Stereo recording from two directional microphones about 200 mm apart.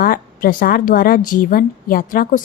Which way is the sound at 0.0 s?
45° left (ahead or behind).